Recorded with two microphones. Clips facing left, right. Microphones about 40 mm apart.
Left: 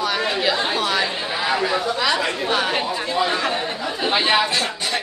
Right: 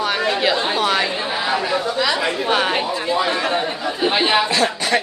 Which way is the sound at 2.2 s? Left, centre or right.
Centre.